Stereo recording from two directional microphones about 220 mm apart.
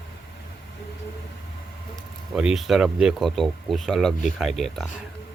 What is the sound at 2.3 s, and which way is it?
Speech, centre (ahead or behind).